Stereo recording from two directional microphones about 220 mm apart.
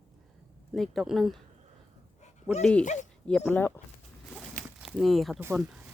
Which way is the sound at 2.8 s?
35° left (ahead or behind).